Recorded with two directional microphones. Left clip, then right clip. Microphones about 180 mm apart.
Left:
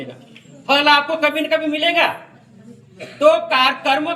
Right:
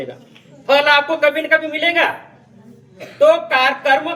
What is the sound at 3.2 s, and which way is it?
Speech, 25° right (ahead or behind).